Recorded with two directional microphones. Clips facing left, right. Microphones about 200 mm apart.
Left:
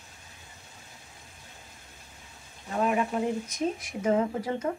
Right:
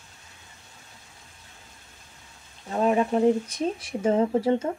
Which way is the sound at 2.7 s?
30° right (ahead or behind).